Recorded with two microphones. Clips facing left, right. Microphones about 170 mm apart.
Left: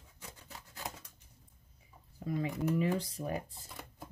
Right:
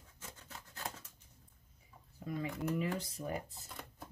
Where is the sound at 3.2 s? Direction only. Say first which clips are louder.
Left 3 dB; 30° left (ahead or behind).